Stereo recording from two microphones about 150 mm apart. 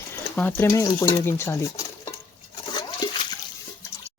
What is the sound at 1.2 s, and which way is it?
Speech, 15° left (ahead or behind).